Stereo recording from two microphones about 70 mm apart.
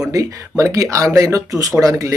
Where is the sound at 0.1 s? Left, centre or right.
Right.